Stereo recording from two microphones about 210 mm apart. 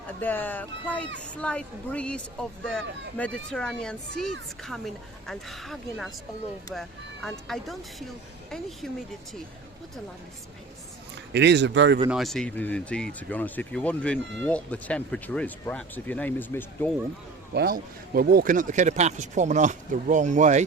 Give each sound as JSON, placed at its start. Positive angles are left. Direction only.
{"t": 0.2, "sound": "speech", "side_deg": 10}
{"t": 11.3, "sound": "a man's voice", "side_deg": -55}
{"t": 12.0, "sound": "speech", "side_deg": 0}
{"t": 17.5, "sound": "speech", "side_deg": -50}